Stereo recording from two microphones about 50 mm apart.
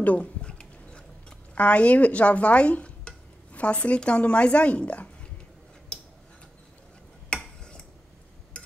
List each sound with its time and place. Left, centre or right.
0.0 s speech: left
0.4 s a sound: centre
1.5 s speech: left
5.9 s tick-tock: centre
7.3 s tick-tock: centre